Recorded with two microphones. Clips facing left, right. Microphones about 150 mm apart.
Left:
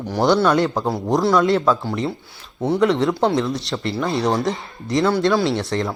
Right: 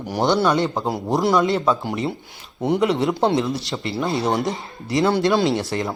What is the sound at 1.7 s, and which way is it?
Speech, 15° right (ahead or behind).